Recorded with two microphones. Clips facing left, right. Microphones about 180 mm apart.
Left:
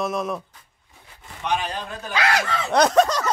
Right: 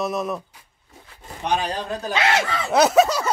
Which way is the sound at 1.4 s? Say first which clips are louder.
Right 2 dB; 35° right (ahead or behind).